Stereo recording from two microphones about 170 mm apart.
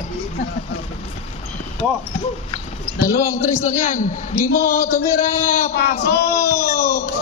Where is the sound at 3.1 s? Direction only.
15° left (ahead or behind).